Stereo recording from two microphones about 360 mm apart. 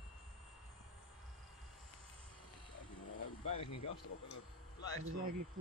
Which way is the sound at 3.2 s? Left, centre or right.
Left.